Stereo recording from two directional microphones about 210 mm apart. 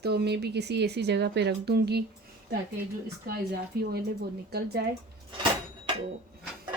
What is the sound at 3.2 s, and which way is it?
Speech, 50° right (ahead or behind).